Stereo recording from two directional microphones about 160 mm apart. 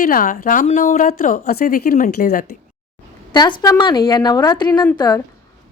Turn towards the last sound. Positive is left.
turn(degrees=20)  # may be behind; listen again after turning